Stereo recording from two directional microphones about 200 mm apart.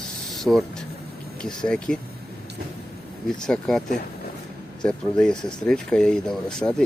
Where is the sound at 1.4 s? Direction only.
5° left (ahead or behind).